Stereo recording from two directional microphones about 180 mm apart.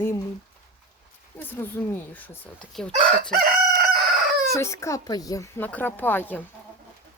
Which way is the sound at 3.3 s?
55° right (ahead or behind).